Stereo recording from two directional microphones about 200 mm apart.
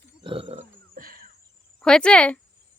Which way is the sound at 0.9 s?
45° right (ahead or behind).